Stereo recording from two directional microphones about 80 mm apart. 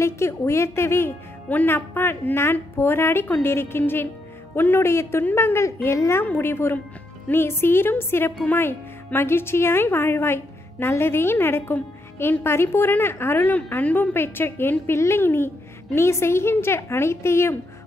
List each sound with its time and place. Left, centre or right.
0.0 s a woman's voice: left